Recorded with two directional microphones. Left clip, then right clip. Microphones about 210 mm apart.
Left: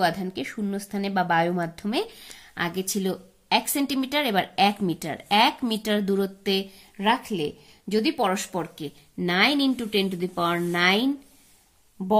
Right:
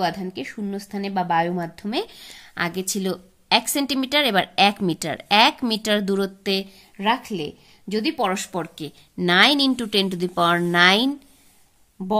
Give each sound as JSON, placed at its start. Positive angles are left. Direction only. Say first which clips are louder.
{"t": 0.0, "sound": "a woman's voice", "louder": "even", "side_deg": -10}
{"t": 12.0, "sound": "speech", "louder": "left 1 dB", "side_deg": -15}